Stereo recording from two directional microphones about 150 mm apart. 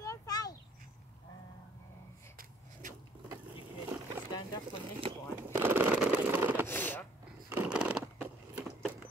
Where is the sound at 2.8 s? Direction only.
60° right (ahead or behind).